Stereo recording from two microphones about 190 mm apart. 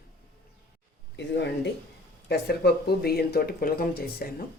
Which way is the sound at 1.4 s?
65° left (ahead or behind).